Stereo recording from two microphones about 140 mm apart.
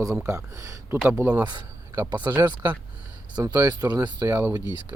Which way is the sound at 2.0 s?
30° right (ahead or behind).